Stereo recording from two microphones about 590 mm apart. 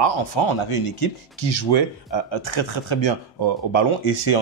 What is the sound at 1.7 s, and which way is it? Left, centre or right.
Speech, left.